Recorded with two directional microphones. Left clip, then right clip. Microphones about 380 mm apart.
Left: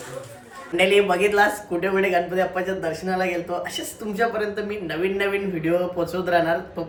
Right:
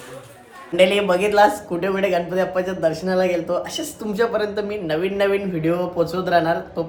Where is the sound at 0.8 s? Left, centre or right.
Centre.